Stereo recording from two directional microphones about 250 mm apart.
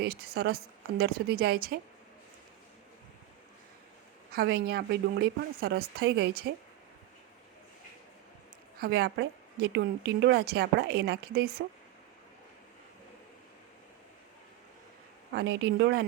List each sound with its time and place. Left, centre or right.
0.0 s a woman's voice: right
4.3 s a woman's voice: right
8.8 s a woman's voice: right
15.3 s speech: right